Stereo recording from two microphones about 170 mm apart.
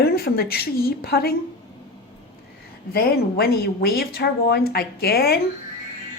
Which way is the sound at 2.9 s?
65° left (ahead or behind).